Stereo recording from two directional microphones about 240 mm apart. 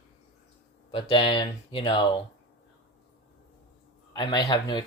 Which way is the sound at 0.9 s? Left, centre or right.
Left.